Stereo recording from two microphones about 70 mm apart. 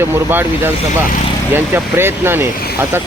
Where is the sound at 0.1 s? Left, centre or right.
Right.